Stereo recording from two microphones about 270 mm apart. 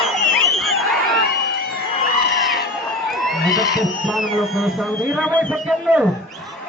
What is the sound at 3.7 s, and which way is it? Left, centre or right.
Speech, centre.